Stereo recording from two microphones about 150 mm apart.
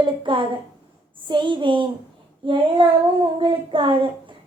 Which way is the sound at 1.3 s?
30° right (ahead or behind).